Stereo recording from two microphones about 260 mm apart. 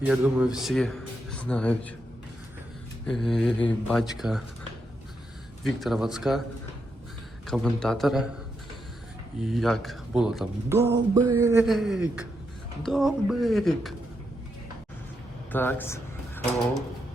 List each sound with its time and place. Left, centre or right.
0.0 s speech: centre
3.1 s speech: centre
5.6 s speech: centre
7.4 s speech: centre
9.4 s speech: centre
11.6 s speech: centre
15.5 s speech: centre